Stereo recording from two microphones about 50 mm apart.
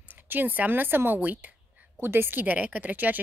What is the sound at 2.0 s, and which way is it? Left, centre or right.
Speech, right.